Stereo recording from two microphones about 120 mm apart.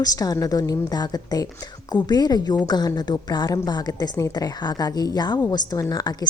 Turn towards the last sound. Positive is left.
turn(degrees=35)  # may be behind; listen again after turning